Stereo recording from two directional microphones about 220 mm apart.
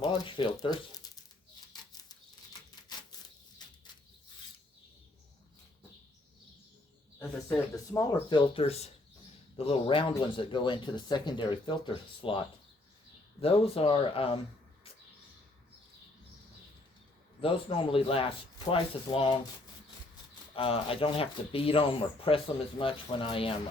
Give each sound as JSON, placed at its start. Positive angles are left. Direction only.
{"t": 0.0, "sound": "speech", "side_deg": 20}
{"t": 1.7, "sound": "bird flight", "side_deg": 15}
{"t": 7.2, "sound": "speech", "side_deg": 10}
{"t": 13.4, "sound": "speech", "side_deg": 25}
{"t": 17.4, "sound": "speech", "side_deg": 25}
{"t": 20.6, "sound": "speech", "side_deg": 25}